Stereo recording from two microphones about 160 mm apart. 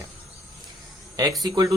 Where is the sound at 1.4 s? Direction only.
25° right (ahead or behind).